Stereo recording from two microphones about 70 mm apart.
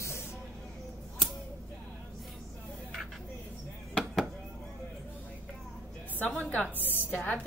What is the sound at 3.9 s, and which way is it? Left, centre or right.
Chop, centre.